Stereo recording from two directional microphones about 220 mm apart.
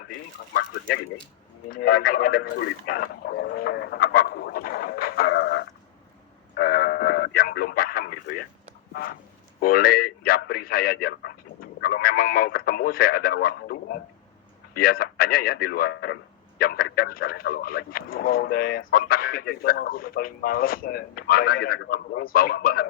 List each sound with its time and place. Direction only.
0.5 s speech: 45° left (ahead or behind)
1.7 s radio: 45° left (ahead or behind)
6.6 s a sound: 45° left (ahead or behind)
9.6 s a man's voice: 40° left (ahead or behind)